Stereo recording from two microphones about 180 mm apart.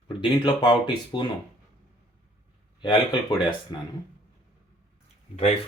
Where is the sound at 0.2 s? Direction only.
25° left (ahead or behind).